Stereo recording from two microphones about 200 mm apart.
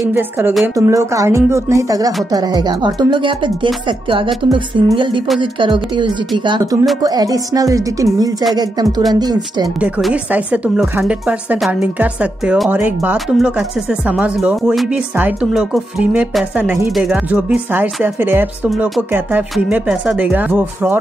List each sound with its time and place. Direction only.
0.1 s speech: 10° right (ahead or behind)
9.8 s speech: 5° right (ahead or behind)